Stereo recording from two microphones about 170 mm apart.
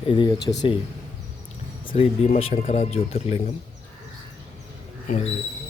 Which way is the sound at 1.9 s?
35° left (ahead or behind).